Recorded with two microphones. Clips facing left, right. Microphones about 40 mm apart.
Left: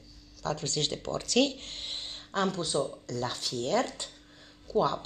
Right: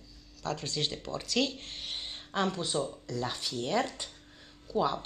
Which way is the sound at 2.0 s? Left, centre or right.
Centre.